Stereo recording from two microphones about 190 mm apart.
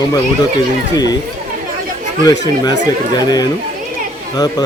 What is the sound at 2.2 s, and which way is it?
Speech, 20° left (ahead or behind).